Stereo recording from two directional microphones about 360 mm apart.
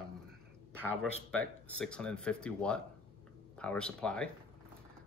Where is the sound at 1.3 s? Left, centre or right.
Centre.